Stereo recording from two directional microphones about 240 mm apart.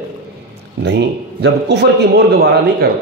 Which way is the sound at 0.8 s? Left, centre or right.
Right.